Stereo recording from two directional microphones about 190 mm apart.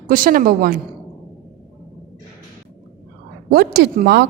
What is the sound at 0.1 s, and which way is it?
Speech, 45° right (ahead or behind).